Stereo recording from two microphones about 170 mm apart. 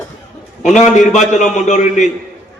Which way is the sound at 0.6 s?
45° left (ahead or behind).